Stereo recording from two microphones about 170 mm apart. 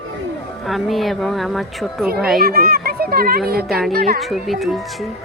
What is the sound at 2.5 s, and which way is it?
Speech, 65° right (ahead or behind).